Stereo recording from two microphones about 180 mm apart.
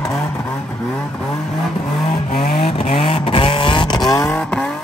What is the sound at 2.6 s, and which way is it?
Vehicle, 30° left (ahead or behind).